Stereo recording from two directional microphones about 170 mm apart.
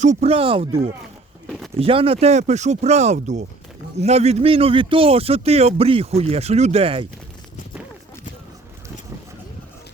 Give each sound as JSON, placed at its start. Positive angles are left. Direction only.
{"t": 0.0, "sound": "speech", "side_deg": -40}
{"t": 1.5, "sound": "a sound", "side_deg": 0}
{"t": 1.8, "sound": "speech", "side_deg": -35}